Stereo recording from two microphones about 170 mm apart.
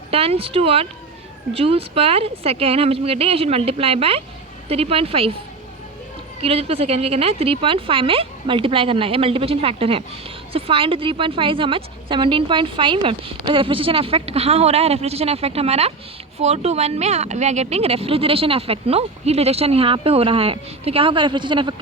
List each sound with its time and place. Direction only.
0.1 s a woman's voice: 35° right (ahead or behind)
6.4 s a woman's voice: 35° right (ahead or behind)